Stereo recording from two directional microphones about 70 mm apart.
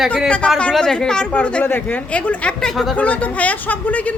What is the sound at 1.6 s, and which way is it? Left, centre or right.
Speech, left.